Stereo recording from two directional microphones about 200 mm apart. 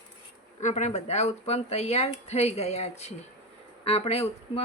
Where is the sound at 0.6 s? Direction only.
35° left (ahead or behind).